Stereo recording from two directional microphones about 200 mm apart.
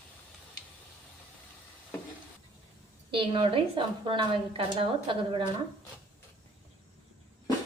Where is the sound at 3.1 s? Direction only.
25° right (ahead or behind).